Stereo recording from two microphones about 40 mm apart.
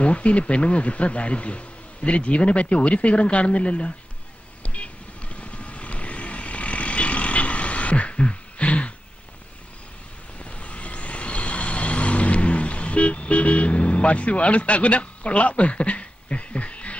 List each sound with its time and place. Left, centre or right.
0.0 s a man's voice: left
4.6 s vehicle: left
10.4 s vehicle: left